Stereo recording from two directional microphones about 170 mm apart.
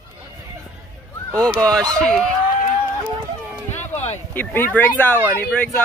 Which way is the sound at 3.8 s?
40° left (ahead or behind).